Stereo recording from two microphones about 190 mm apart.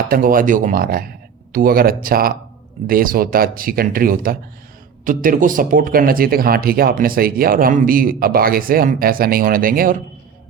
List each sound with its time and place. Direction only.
0.1 s speech: 45° right (ahead or behind)